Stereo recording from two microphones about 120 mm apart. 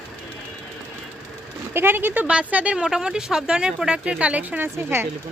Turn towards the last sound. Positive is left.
turn(degrees=-15)  # may be behind; listen again after turning